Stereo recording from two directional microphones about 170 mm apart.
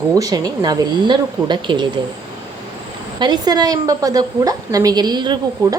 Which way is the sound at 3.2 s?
25° right (ahead or behind).